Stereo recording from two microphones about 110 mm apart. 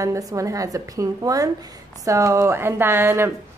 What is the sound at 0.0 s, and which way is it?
A woman's voice, 30° right (ahead or behind).